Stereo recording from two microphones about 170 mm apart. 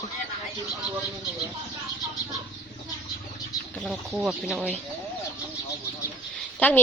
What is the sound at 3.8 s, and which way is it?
Speech, centre (ahead or behind).